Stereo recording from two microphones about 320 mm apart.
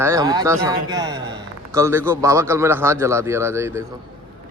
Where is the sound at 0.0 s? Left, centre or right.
Centre.